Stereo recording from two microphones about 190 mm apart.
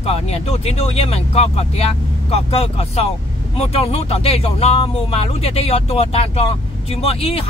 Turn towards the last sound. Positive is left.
turn(degrees=30)  # may be behind; listen again after turning